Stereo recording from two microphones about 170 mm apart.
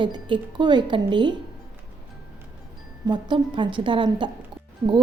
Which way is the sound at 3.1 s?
25° right (ahead or behind).